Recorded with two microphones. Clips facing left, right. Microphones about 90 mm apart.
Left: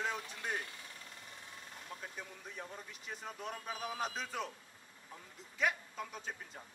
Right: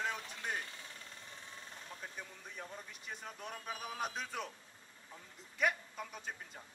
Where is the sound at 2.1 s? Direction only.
Centre (ahead or behind).